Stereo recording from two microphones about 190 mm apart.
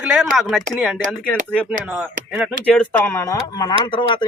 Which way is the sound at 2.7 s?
10° left (ahead or behind).